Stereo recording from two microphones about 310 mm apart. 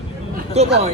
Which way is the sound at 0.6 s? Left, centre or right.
Centre.